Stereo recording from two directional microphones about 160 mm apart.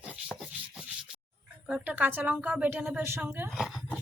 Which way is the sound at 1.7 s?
10° right (ahead or behind).